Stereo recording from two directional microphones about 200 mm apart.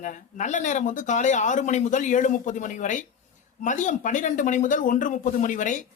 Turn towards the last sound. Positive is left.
turn(degrees=40)  # may be behind; listen again after turning